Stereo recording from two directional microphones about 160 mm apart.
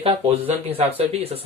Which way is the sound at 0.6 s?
40° right (ahead or behind).